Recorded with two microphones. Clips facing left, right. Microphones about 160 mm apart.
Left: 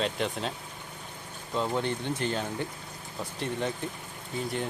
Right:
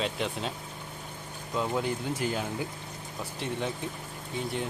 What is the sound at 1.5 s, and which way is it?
Speech, 5° right (ahead or behind).